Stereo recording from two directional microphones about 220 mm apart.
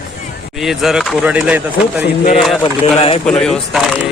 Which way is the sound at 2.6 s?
25° left (ahead or behind).